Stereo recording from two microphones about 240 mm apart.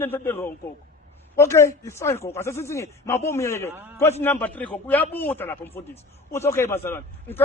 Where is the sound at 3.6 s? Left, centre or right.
Centre.